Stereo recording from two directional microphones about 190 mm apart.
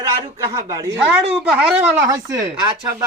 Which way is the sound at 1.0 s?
5° right (ahead or behind).